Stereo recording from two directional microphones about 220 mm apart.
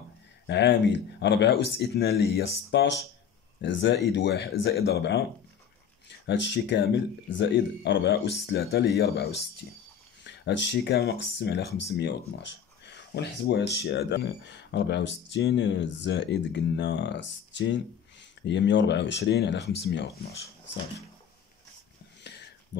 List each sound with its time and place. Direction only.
0.5 s speech: 50° left (ahead or behind)